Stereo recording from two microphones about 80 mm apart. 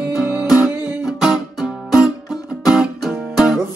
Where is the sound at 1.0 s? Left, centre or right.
Centre.